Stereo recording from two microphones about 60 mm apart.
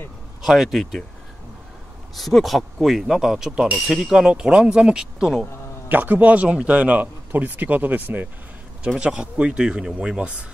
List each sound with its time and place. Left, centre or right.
0.4 s speech: centre
2.1 s speech: centre
5.9 s speech: right
9.0 s speech: centre